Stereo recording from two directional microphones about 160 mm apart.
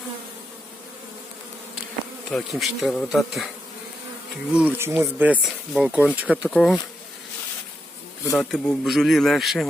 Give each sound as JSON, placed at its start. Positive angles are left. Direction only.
{"t": 2.3, "sound": "bee", "side_deg": 0}
{"t": 4.5, "sound": "speech", "side_deg": -10}
{"t": 6.5, "sound": "bee", "side_deg": 0}
{"t": 8.4, "sound": "bee", "side_deg": 5}